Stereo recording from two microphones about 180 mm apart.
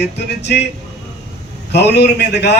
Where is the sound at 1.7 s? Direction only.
70° left (ahead or behind).